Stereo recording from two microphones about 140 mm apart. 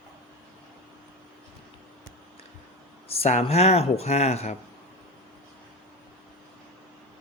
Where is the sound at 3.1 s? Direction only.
45° left (ahead or behind).